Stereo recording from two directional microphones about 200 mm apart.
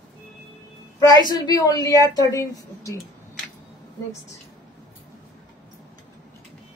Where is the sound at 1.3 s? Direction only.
20° left (ahead or behind).